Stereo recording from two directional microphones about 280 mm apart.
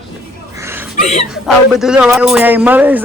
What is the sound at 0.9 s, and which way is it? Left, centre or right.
Chuckle, left.